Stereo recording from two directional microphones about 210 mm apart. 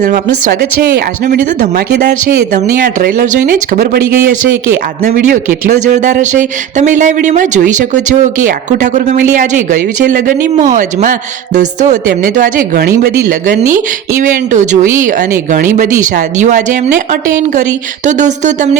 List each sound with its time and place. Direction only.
0.6 s speech: 45° right (ahead or behind)
2.7 s speech: 40° right (ahead or behind)
4.2 s speech: 10° right (ahead or behind)
5.0 s speech: 35° right (ahead or behind)